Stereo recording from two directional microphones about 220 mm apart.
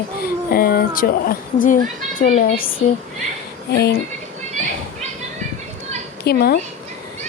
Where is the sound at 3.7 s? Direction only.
45° left (ahead or behind).